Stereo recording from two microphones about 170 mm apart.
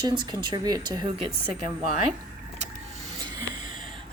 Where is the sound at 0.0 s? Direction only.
25° right (ahead or behind).